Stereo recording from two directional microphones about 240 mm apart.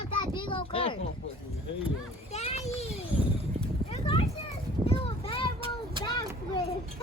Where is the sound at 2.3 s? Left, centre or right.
Left.